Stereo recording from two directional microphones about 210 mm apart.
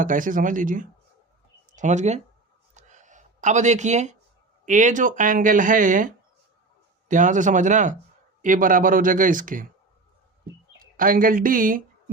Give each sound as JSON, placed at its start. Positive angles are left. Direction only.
{"t": 0.0, "sound": "speech", "side_deg": -40}
{"t": 2.7, "sound": "a sound", "side_deg": -35}
{"t": 4.6, "sound": "speech", "side_deg": -35}
{"t": 10.8, "sound": "speech", "side_deg": -40}